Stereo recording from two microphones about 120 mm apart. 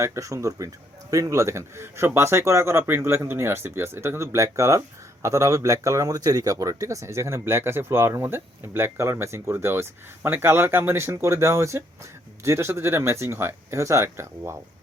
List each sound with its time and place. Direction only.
0.0 s speech: 25° right (ahead or behind)